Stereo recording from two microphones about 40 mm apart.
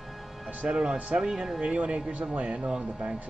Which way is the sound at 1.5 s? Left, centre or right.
Right.